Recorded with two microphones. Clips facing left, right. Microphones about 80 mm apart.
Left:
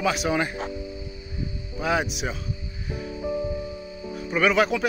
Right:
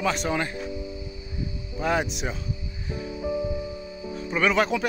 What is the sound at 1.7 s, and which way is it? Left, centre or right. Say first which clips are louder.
Speech: even; centre.